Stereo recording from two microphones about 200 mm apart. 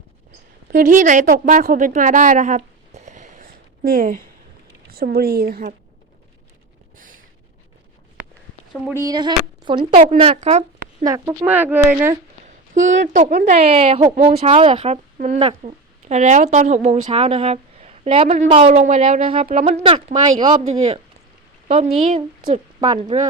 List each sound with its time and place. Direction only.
0.7 s a woman's voice: 40° right (ahead or behind)
6.9 s a sound: 40° right (ahead or behind)
8.7 s speech: 10° right (ahead or behind); by 10.6 s 30° right (ahead or behind)
11.0 s speech: 15° right (ahead or behind)
12.5 s speech: 40° right (ahead or behind)